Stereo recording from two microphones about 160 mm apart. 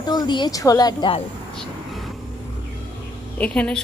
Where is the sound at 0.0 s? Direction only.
25° left (ahead or behind).